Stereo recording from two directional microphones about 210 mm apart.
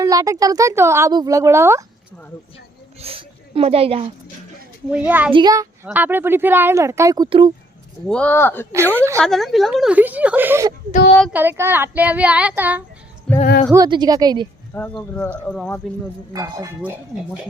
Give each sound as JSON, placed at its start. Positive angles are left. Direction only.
{"t": 0.0, "sound": "a woman's voice", "side_deg": -15}
{"t": 3.0, "sound": "speech", "side_deg": -25}
{"t": 4.9, "sound": "a woman's voice", "side_deg": -5}
{"t": 5.3, "sound": "a woman's voice", "side_deg": -20}
{"t": 8.0, "sound": "speech", "side_deg": 5}
{"t": 8.7, "sound": "a woman's voice", "side_deg": -10}
{"t": 9.2, "sound": "a woman's voice", "side_deg": 0}
{"t": 13.7, "sound": "a woman's voice", "side_deg": -20}
{"t": 14.8, "sound": "speech", "side_deg": 5}
{"t": 16.3, "sound": "a woman's voice", "side_deg": -15}